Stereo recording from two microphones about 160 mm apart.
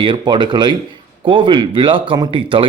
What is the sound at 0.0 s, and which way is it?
Speech, 30° right (ahead or behind).